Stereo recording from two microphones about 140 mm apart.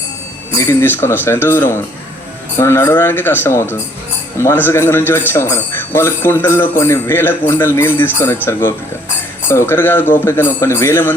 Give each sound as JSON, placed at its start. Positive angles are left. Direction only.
{"t": 0.5, "sound": "speech", "side_deg": 15}